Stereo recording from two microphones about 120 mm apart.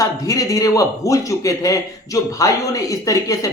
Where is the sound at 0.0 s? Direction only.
25° left (ahead or behind).